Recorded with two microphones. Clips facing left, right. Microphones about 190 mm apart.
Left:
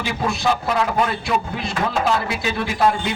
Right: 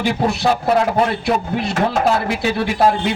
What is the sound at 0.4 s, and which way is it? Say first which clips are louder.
Speech: right 4 dB; 40° right (ahead or behind).